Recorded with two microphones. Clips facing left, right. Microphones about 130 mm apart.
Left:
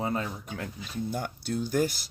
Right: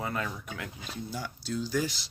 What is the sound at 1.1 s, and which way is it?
Speech, 55° left (ahead or behind).